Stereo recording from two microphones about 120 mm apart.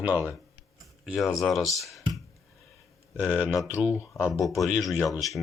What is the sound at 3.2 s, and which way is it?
Speech, 10° right (ahead or behind).